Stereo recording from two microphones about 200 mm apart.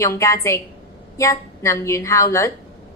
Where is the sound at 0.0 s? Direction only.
15° left (ahead or behind).